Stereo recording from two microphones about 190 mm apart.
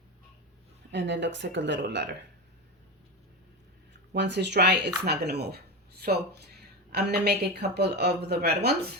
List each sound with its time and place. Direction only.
0.9 s speech: 70° right (ahead or behind)
4.1 s speech: 65° right (ahead or behind)